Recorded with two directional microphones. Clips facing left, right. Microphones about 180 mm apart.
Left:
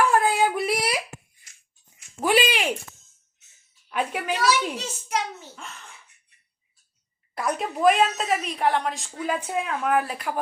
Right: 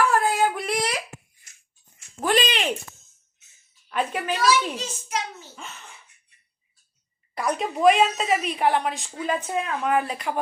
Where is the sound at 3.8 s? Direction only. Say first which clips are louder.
Right 1 dB; 10° left (ahead or behind).